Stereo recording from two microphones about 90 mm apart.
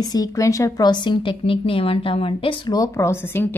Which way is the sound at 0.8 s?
55° left (ahead or behind).